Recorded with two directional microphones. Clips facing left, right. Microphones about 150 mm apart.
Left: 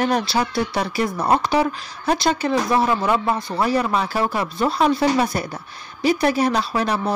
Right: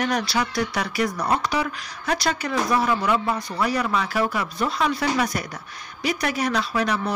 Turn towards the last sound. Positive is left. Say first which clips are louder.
# left 2 dB
turn(degrees=30)  # may be behind; listen again after turning